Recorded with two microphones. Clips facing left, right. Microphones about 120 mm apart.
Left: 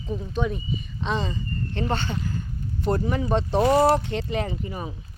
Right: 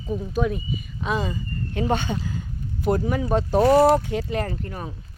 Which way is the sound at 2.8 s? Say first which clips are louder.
Right 2 dB; 5° right (ahead or behind).